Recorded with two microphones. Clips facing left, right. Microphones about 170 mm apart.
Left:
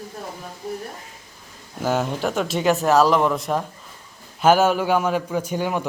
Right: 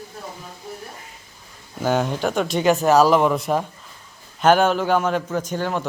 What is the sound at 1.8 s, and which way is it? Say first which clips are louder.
A man's voice: right 1 dB; 5° left (ahead or behind).